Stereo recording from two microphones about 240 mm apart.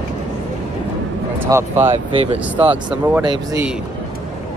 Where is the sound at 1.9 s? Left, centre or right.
Right.